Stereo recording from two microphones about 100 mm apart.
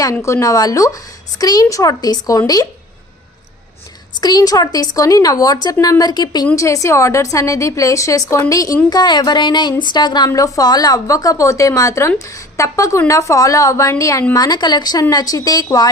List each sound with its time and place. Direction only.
0.0 s a woman's voice: 30° left (ahead or behind)
4.2 s a woman's voice: 40° left (ahead or behind)
6.6 s a woman's voice: 30° left (ahead or behind)
10.2 s a woman's voice: 35° left (ahead or behind)
14.3 s a woman's voice: 40° left (ahead or behind)